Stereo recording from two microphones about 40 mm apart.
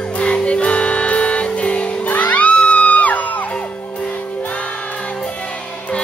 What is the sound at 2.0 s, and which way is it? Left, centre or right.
Music, left.